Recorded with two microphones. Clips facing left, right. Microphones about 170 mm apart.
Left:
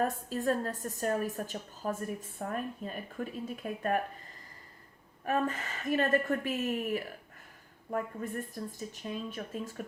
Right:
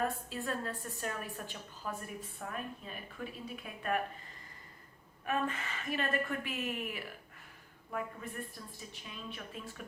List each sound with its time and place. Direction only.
0.0 s a woman's voice: 40° left (ahead or behind)
5.2 s a woman's voice: 40° left (ahead or behind)